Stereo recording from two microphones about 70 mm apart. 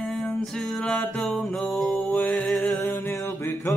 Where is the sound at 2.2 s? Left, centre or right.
Left.